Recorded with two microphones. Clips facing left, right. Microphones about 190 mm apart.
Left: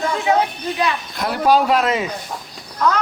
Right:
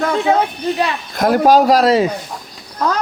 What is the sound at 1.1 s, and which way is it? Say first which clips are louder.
Speech: right 6 dB; 45° right (ahead or behind).